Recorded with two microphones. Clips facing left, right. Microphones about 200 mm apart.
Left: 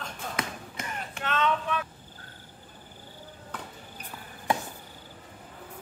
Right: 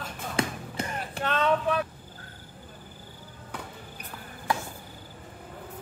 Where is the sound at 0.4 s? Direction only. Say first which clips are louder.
Right 9 dB; 35° right (ahead or behind).